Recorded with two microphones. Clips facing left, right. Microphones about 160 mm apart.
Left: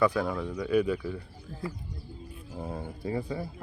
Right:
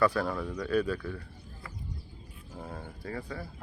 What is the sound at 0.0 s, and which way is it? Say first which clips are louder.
Speech: left 1 dB; 15° left (ahead or behind).